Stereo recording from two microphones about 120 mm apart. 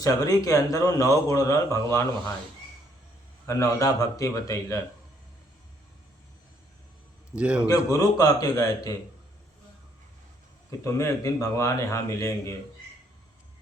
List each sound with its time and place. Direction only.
0.0 s speech: 30° left (ahead or behind)
3.4 s speech: 25° left (ahead or behind)
7.3 s a man's voice: 10° right (ahead or behind)
7.7 s speech: 30° left (ahead or behind)
10.7 s speech: 25° left (ahead or behind)